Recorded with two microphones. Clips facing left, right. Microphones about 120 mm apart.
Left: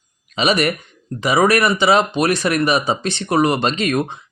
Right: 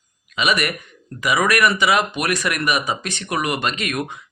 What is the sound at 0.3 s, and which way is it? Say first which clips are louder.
Speech: left 4 dB; 30° left (ahead or behind).